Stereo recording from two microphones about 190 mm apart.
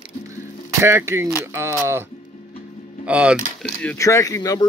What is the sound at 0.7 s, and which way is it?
Speech, 15° right (ahead or behind).